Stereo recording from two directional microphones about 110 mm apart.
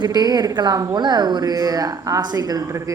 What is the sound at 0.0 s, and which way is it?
Speech, 40° right (ahead or behind).